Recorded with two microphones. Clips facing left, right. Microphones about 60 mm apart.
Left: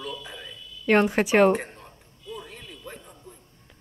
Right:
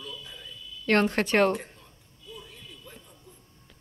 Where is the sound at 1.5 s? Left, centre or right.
Left.